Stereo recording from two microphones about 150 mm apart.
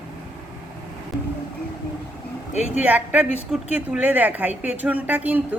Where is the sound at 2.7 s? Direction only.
10° right (ahead or behind).